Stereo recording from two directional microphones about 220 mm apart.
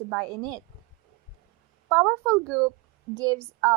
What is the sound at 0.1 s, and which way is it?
Speech, 15° right (ahead or behind).